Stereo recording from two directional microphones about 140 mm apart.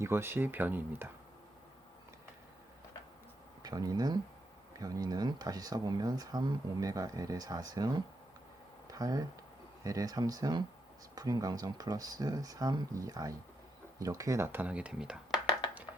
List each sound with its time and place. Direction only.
0.0 s speech: 15° right (ahead or behind)
3.6 s speech: 30° right (ahead or behind); by 15.4 s 5° right (ahead or behind)